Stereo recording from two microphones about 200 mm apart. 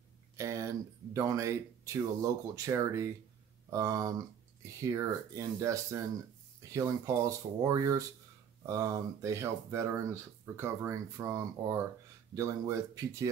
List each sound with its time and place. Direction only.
0.4 s speech: 15° right (ahead or behind)